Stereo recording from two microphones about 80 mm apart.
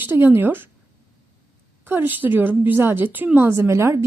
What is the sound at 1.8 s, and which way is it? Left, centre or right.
A woman's voice, right.